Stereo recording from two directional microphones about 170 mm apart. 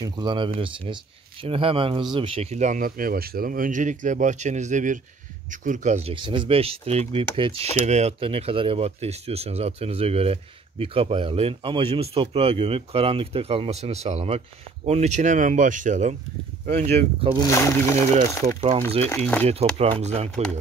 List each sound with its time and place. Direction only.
0.0 s speech: 25° right (ahead or behind); by 17.3 s 40° right (ahead or behind)
17.5 s speech: 15° left (ahead or behind)
19.8 s speech: 40° right (ahead or behind)